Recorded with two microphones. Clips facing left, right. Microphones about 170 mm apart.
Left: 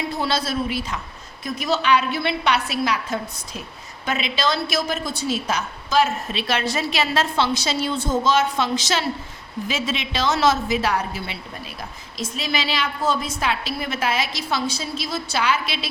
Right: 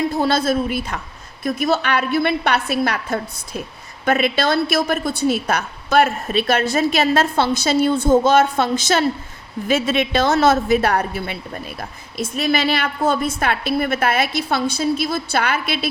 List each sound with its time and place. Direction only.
0.2 s a woman's voice: 50° right (ahead or behind)